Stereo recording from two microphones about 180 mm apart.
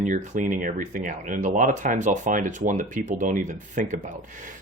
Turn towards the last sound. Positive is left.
turn(degrees=-45)  # may be behind; listen again after turning